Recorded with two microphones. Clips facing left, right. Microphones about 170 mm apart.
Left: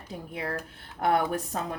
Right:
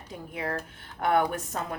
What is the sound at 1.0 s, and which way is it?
Speech, 35° left (ahead or behind).